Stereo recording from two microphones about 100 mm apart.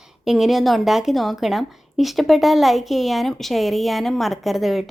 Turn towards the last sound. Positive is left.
turn(degrees=0)  # may be behind; listen again after turning